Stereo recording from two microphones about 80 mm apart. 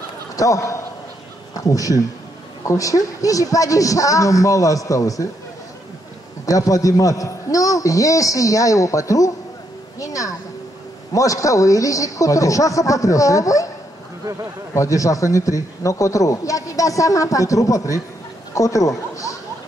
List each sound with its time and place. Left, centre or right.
0.4 s a man's voice: left
6.4 s speech: left
14.7 s speech: left